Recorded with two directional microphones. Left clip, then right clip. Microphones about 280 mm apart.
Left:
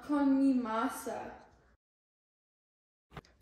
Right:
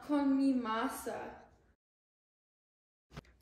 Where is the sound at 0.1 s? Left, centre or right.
Centre.